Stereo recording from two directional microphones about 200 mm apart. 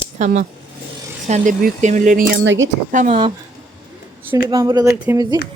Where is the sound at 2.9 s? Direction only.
40° right (ahead or behind).